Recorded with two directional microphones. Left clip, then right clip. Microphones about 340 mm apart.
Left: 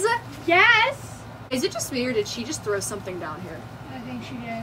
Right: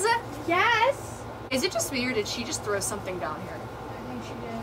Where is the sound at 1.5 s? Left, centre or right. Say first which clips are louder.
Left 1 dB; centre.